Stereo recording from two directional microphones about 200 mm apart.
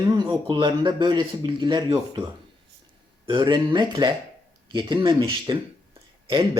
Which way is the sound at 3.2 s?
25° right (ahead or behind).